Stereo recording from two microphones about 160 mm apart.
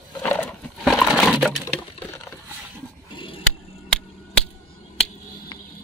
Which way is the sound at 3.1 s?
30° left (ahead or behind).